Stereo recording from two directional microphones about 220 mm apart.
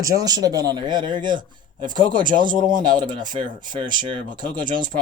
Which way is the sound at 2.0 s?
20° right (ahead or behind).